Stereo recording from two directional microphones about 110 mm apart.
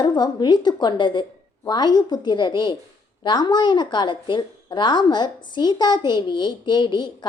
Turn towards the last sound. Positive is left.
turn(degrees=45)  # may be behind; listen again after turning